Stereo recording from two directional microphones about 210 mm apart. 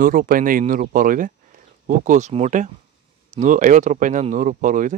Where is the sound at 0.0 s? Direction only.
40° right (ahead or behind).